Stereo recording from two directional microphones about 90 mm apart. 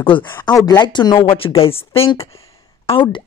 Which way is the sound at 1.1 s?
90° left.